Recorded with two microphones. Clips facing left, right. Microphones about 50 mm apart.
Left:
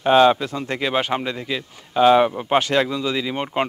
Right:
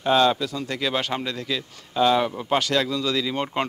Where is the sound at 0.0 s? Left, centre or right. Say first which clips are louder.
Left 5 dB; left.